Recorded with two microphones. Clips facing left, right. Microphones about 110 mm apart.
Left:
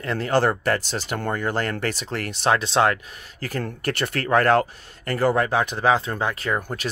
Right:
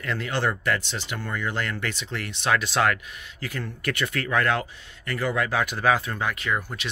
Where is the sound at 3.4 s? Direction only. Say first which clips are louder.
Left 5 dB; 40° left (ahead or behind).